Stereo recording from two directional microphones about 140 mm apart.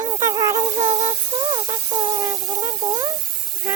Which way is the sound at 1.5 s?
40° right (ahead or behind).